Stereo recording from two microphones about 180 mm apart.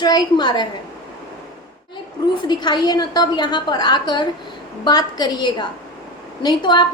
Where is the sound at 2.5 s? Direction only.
25° left (ahead or behind).